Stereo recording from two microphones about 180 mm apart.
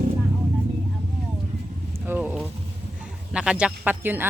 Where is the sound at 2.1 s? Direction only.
10° right (ahead or behind).